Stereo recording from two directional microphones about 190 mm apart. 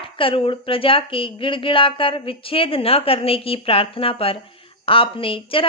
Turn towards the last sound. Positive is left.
turn(degrees=25)  # may be behind; listen again after turning